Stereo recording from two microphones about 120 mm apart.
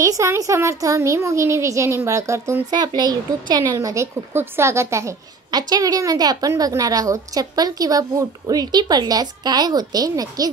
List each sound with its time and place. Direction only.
0.0 s a child's voice: 25° right (ahead or behind)
3.0 s a woman's voice: 35° right (ahead or behind)